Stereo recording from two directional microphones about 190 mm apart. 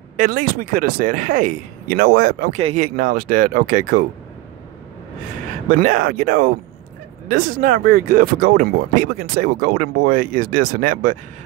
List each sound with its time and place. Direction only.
0.2 s speech: 45° right (ahead or behind)
5.7 s speech: 45° right (ahead or behind)